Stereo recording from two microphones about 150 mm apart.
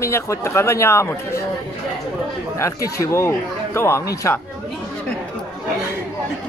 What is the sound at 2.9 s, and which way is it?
Speech, 20° left (ahead or behind).